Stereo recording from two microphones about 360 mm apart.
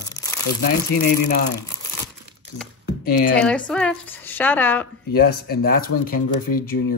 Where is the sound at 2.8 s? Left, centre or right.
Left.